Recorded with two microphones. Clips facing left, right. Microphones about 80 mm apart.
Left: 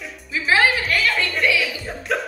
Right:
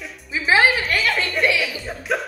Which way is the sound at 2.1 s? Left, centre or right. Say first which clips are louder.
Even; centre.